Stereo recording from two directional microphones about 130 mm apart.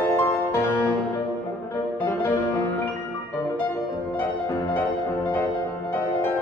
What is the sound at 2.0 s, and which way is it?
Music, 20° left (ahead or behind).